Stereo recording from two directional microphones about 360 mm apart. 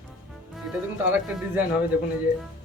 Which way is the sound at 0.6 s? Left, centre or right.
Centre.